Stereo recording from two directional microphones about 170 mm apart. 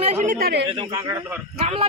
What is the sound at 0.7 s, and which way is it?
Speech, 25° right (ahead or behind).